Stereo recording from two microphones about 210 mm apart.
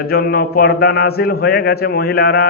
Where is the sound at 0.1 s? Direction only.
45° left (ahead or behind).